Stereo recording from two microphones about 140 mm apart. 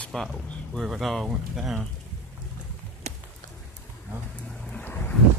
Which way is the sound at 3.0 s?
50° right (ahead or behind).